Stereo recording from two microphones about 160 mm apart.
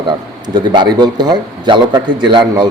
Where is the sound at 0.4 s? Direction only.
30° right (ahead or behind).